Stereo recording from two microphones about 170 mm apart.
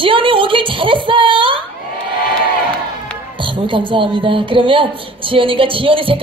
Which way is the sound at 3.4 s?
30° right (ahead or behind).